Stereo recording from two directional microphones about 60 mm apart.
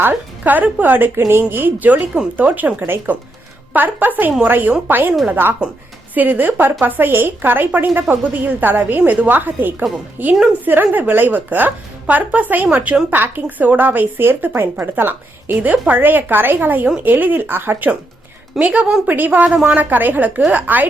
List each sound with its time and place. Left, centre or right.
0.0 s a woman's voice: right
18.6 s a woman's voice: right